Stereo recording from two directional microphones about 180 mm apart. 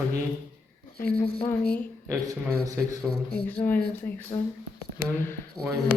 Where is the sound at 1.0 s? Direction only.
10° left (ahead or behind).